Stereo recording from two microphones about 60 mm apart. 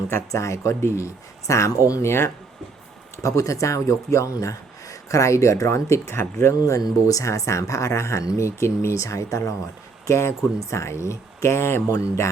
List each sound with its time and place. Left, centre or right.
0.3 s speech: left
3.2 s speech: left